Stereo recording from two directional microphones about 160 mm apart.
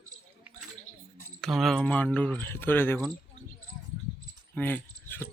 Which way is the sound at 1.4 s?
Centre (ahead or behind).